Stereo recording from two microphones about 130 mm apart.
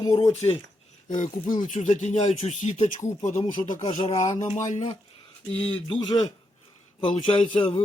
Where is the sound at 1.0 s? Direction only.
90° left; by 3.8 s 70° left (ahead or behind).